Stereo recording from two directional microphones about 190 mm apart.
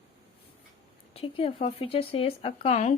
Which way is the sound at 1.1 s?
30° left (ahead or behind).